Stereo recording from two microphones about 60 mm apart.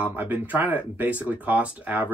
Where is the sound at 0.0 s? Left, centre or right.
Right.